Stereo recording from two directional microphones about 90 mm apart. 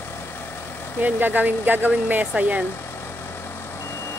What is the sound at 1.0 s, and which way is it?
Speech, 20° right (ahead or behind).